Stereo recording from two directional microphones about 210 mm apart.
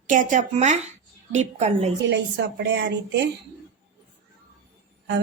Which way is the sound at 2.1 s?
55° right (ahead or behind).